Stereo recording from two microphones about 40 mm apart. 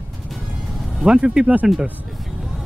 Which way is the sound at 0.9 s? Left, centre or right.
Right.